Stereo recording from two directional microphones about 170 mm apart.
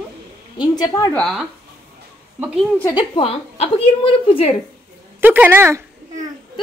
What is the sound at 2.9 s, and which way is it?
A woman's voice, 30° left (ahead or behind).